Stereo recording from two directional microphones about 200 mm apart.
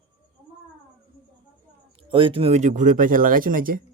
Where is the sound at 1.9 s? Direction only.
25° right (ahead or behind); by 3.8 s 45° right (ahead or behind).